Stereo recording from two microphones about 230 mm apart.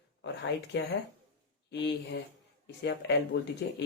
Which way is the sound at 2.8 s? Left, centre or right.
Left.